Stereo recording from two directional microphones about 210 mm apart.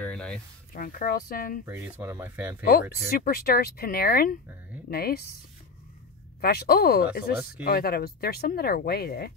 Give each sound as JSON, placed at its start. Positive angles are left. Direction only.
{"t": 0.0, "sound": "a sound", "side_deg": 5}
{"t": 0.7, "sound": "speech", "side_deg": 45}
{"t": 1.7, "sound": "speech", "side_deg": -10}
{"t": 2.6, "sound": "speech", "side_deg": 45}
{"t": 6.4, "sound": "speech", "side_deg": 45}